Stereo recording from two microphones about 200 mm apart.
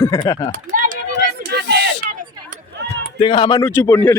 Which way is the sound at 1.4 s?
55° right (ahead or behind).